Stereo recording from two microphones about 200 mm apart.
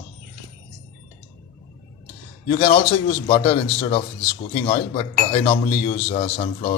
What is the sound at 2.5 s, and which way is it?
A man's voice, 25° left (ahead or behind).